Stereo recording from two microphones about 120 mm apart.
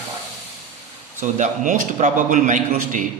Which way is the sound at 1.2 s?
90° right.